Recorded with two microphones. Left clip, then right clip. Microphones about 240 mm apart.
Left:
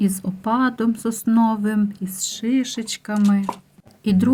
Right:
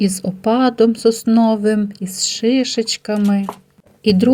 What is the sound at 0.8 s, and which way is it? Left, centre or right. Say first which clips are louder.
A woman's voice: right 11 dB; centre.